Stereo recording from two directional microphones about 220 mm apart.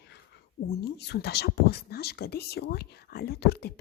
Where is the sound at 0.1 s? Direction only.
50° left (ahead or behind).